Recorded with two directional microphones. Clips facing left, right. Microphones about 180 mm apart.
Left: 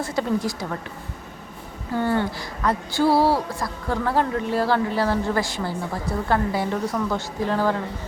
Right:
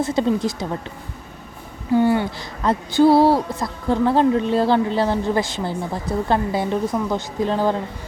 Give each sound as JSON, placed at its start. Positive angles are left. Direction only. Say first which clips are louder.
{"t": 0.0, "sound": "a woman's voice", "louder": "right 4 dB", "side_deg": -20}
{"t": 1.9, "sound": "a woman's voice", "louder": "right 5 dB", "side_deg": -15}